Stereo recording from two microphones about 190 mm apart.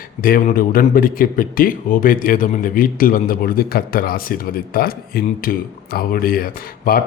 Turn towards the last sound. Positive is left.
turn(degrees=50)  # may be behind; listen again after turning